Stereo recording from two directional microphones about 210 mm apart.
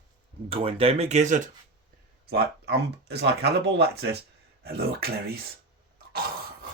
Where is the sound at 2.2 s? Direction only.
50° right (ahead or behind).